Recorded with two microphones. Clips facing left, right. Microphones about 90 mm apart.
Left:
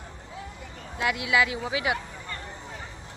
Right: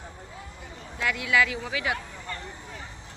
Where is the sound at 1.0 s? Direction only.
10° left (ahead or behind).